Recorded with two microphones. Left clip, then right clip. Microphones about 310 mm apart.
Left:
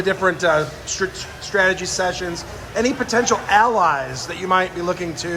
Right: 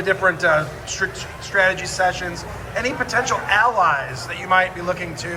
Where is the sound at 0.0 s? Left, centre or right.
Left.